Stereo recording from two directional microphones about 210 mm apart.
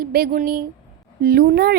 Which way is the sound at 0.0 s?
45° right (ahead or behind).